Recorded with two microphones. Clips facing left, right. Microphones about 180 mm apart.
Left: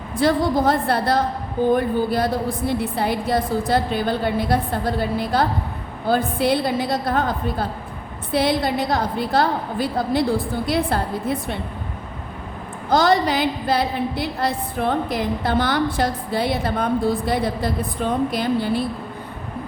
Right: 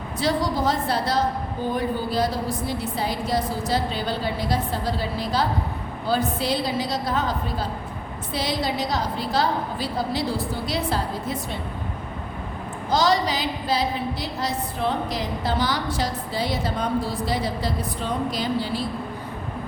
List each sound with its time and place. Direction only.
0.2 s a woman's voice: 55° left (ahead or behind)
12.9 s a woman's voice: 55° left (ahead or behind)